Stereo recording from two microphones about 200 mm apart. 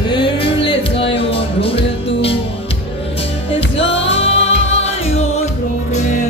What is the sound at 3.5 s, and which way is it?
Music, 30° left (ahead or behind).